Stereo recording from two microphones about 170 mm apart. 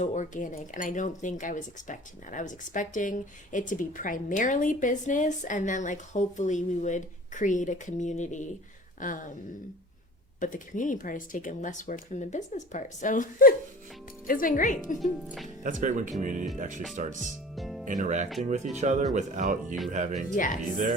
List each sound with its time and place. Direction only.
0.0 s speech: 45° left (ahead or behind)
10.4 s speech: 50° left (ahead or behind)
15.6 s speech: 50° right (ahead or behind)
17.5 s music: centre (ahead or behind)
17.8 s speech: 50° right (ahead or behind)
20.3 s speech: 50° left (ahead or behind)